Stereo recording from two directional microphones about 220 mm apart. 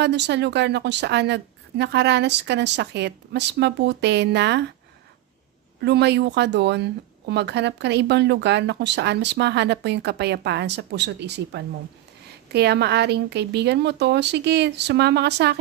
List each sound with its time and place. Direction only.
0.0 s speech: 50° right (ahead or behind)
5.8 s speech: 50° right (ahead or behind)